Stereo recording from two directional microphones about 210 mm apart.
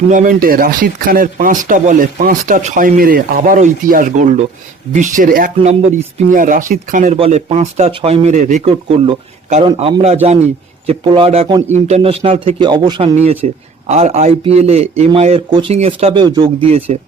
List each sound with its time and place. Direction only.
0.1 s a man's voice: 40° right (ahead or behind); by 13.1 s 20° right (ahead or behind)
13.1 s a man's voice: 30° right (ahead or behind)